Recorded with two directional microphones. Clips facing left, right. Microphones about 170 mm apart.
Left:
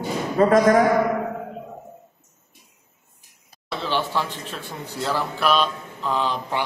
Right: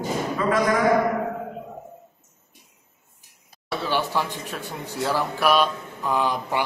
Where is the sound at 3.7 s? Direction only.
10° right (ahead or behind).